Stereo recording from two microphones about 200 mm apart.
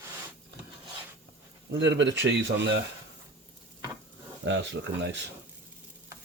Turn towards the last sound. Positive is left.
turn(degrees=-60)  # may be behind; listen again after turning